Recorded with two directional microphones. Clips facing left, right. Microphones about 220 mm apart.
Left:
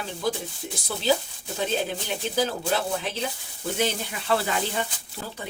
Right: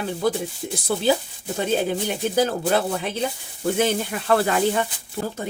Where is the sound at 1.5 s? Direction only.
50° right (ahead or behind).